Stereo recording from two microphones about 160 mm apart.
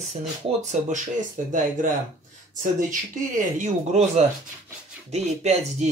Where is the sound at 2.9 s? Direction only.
55° right (ahead or behind).